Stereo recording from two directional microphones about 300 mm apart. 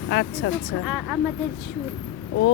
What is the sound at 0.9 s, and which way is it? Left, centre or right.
Speech, centre.